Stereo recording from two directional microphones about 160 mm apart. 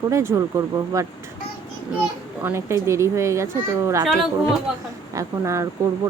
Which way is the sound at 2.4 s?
15° right (ahead or behind).